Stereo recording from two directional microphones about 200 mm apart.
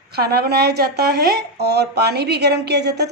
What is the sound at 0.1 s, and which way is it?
Speech, 55° right (ahead or behind).